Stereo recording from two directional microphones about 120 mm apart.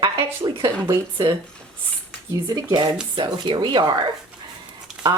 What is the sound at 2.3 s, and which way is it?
Speech, 35° right (ahead or behind).